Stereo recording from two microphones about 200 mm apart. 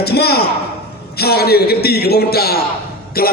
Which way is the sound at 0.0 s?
55° left (ahead or behind).